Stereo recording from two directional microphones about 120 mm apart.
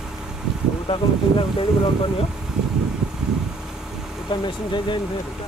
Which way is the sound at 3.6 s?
5° right (ahead or behind).